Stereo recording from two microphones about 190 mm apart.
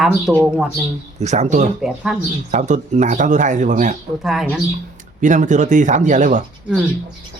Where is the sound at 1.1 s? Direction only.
35° right (ahead or behind).